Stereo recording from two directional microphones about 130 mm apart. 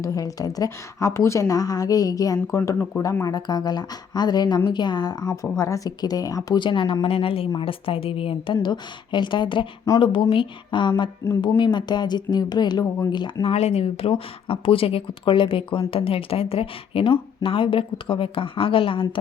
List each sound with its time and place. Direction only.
0.0 s a woman's voice: 25° left (ahead or behind)
2.6 s speech: 15° left (ahead or behind)
3.0 s speech: 25° left (ahead or behind)
13.5 s speech: 50° left (ahead or behind)